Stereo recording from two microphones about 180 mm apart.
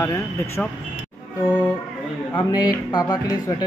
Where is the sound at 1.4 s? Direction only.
10° left (ahead or behind).